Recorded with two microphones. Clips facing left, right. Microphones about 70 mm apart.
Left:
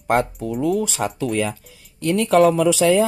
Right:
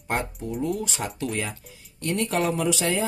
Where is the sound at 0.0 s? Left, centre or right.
Left.